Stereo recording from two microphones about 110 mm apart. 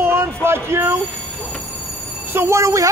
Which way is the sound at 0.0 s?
20° right (ahead or behind).